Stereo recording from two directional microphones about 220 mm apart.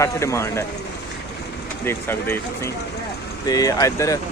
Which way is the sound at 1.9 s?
10° left (ahead or behind).